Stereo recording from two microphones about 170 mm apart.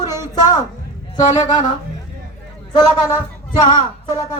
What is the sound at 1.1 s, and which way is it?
Speech, 25° left (ahead or behind).